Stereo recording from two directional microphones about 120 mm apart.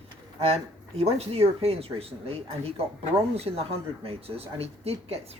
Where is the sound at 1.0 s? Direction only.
60° right (ahead or behind).